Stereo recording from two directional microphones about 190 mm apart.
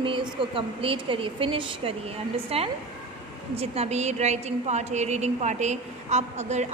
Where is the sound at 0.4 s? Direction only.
30° right (ahead or behind).